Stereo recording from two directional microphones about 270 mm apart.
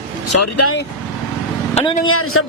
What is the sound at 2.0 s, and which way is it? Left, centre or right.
Speech, left.